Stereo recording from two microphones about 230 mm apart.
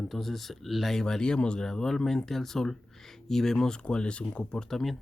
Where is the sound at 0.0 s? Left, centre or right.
Centre.